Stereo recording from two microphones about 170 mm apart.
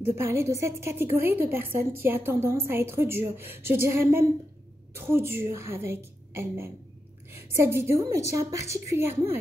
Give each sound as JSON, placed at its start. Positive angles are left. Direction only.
{"t": 0.0, "sound": "a woman's voice", "side_deg": -15}